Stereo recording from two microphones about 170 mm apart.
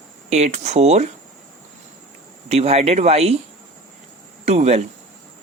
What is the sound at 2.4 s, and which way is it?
Speech, 40° right (ahead or behind).